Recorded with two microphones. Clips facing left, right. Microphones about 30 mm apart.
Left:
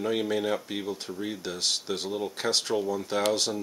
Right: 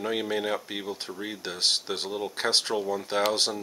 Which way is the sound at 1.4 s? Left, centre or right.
Right.